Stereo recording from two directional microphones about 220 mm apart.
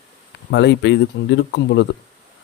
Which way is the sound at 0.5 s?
55° left (ahead or behind).